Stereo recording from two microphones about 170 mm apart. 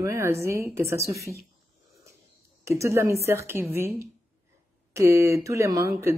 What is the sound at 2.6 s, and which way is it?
Speech, 15° right (ahead or behind).